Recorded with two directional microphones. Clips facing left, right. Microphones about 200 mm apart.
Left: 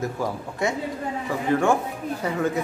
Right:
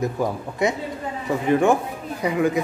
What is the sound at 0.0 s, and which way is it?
A man's voice, 20° right (ahead or behind).